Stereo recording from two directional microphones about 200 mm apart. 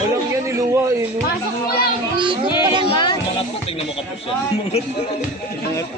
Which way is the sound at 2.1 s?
25° right (ahead or behind).